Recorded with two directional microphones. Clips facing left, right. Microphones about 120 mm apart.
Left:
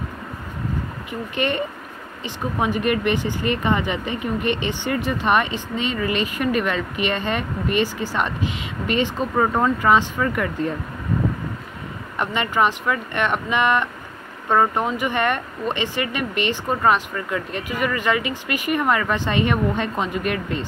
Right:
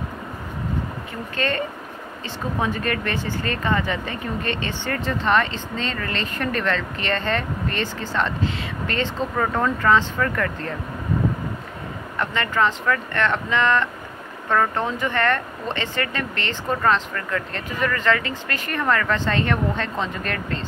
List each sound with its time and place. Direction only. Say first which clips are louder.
1.3 s speech: left 1 dB; 15° left (ahead or behind)
12.2 s speech: left 1 dB; 15° left (ahead or behind)